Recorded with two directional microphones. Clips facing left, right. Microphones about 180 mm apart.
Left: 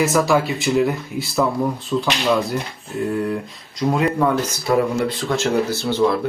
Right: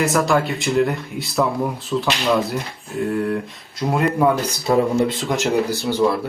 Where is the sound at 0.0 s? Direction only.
Centre (ahead or behind).